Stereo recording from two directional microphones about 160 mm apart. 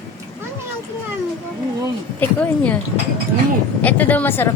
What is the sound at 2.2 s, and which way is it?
Speech, 10° left (ahead or behind).